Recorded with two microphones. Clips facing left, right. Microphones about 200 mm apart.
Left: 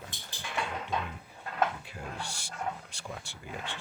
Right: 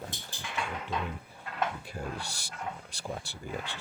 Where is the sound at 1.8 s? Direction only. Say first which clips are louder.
Right 3 dB; 40° right (ahead or behind).